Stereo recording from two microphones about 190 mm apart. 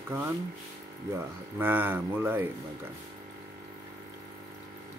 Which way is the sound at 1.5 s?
10° right (ahead or behind).